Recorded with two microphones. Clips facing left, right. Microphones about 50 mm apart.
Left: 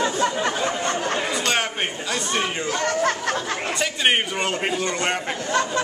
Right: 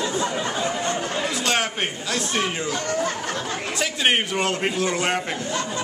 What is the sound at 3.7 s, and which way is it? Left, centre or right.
A man's voice, centre.